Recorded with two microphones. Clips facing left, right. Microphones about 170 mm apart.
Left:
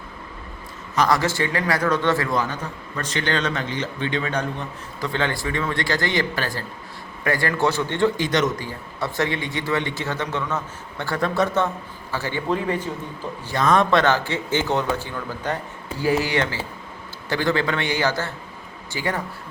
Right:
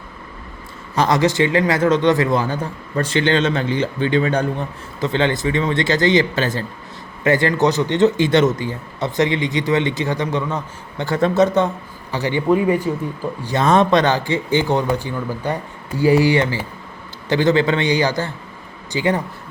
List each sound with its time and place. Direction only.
0.9 s a man's voice: 20° right (ahead or behind)
2.4 s a man's voice: 30° right (ahead or behind); by 12.9 s 10° right (ahead or behind)
13.4 s a man's voice: 20° right (ahead or behind)